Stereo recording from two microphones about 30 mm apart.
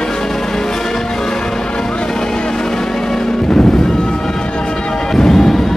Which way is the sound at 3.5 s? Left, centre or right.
Left.